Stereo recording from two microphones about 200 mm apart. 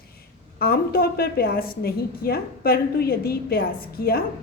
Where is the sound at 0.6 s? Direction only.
50° left (ahead or behind).